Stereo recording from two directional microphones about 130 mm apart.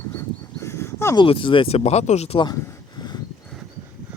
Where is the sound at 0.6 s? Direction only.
20° left (ahead or behind).